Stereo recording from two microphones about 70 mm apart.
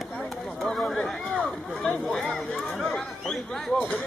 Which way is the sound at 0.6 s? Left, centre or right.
Centre.